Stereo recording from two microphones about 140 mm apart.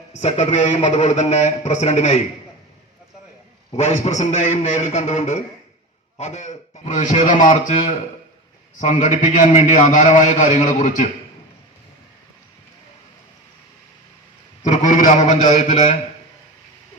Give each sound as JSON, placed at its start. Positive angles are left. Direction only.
{"t": 0.1, "sound": "a man's voice", "side_deg": 55}
{"t": 3.7, "sound": "a man's voice", "side_deg": 50}
{"t": 14.6, "sound": "a man's voice", "side_deg": 60}